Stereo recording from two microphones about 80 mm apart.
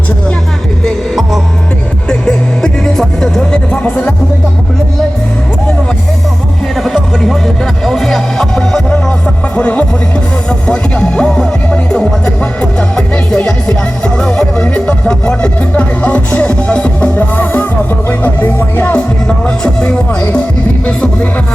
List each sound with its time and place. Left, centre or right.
0.9 s music: centre
6.7 s music: centre; by 18.9 s left
19.5 s music: centre